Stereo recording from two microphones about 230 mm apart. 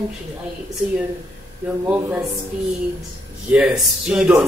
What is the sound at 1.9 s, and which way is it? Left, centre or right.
Speech, centre.